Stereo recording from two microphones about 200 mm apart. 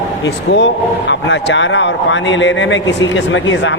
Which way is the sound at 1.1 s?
60° left (ahead or behind).